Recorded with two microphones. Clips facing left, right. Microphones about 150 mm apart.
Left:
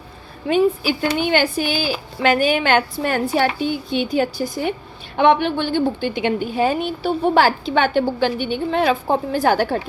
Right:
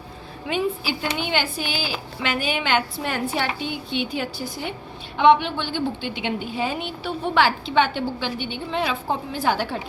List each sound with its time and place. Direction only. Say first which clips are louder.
0.4 s a woman's voice: left 8 dB; 45° left (ahead or behind)